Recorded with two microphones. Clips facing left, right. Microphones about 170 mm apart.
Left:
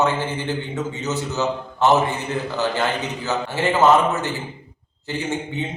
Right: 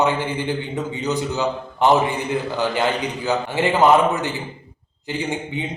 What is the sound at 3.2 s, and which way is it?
A man's voice, 15° right (ahead or behind).